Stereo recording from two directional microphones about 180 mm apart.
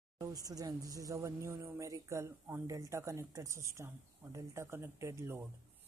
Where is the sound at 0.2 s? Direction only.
20° right (ahead or behind).